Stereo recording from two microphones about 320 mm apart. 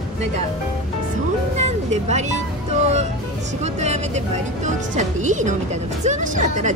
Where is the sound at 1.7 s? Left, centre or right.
Right.